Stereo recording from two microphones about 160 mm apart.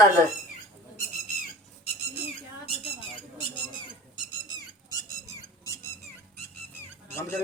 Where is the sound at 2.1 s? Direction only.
35° left (ahead or behind).